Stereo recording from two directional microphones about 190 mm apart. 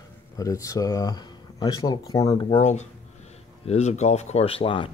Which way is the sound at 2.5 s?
35° left (ahead or behind).